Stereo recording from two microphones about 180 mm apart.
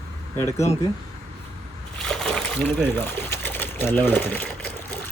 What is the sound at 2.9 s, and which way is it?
Speech, 10° left (ahead or behind).